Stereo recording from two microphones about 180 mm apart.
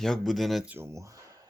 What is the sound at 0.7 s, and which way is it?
Speech, 15° right (ahead or behind).